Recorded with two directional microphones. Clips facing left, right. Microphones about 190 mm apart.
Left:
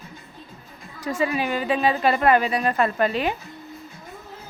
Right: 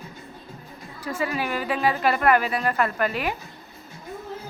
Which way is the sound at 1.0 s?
20° left (ahead or behind).